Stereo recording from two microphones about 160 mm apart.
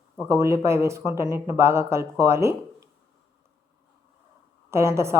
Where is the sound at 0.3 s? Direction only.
20° right (ahead or behind).